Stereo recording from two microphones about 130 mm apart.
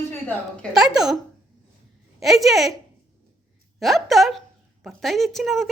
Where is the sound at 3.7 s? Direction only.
Centre (ahead or behind).